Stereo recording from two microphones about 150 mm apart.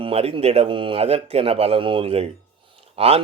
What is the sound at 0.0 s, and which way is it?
Speech, 40° right (ahead or behind).